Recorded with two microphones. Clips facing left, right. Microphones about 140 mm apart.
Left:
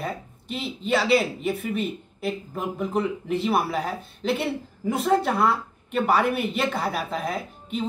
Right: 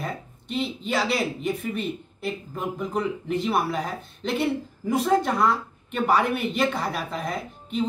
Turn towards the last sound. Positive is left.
turn(degrees=5)  # may be behind; listen again after turning